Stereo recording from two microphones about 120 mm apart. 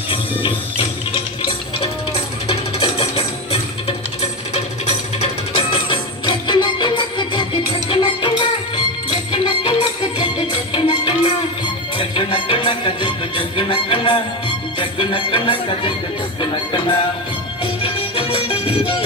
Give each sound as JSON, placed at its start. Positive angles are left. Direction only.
{"t": 0.1, "sound": "music", "side_deg": 50}
{"t": 3.8, "sound": "music", "side_deg": 60}
{"t": 14.8, "sound": "speech", "side_deg": 45}
{"t": 17.8, "sound": "music", "side_deg": 50}